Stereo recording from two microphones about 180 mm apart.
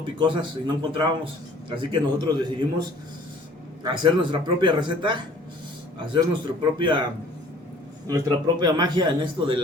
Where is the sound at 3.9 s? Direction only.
25° right (ahead or behind).